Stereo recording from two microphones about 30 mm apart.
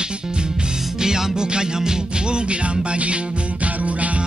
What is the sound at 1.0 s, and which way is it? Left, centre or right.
Music, right.